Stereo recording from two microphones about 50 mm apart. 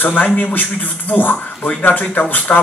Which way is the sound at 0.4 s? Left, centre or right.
Left.